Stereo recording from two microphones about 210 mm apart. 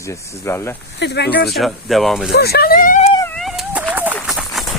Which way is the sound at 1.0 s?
55° left (ahead or behind).